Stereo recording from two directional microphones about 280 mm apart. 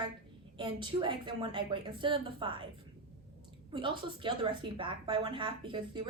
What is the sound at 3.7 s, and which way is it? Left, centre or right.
A woman's voice, centre.